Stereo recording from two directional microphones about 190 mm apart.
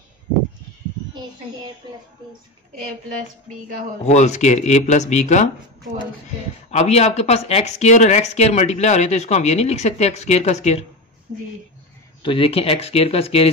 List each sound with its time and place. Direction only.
2.2 s a woman's voice: 25° right (ahead or behind)
4.0 s speech: 35° left (ahead or behind)
6.7 s speech: 35° left (ahead or behind)
12.2 s speech: 25° left (ahead or behind)